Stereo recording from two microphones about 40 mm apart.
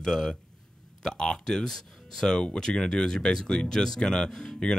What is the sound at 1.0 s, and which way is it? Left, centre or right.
Speech, centre.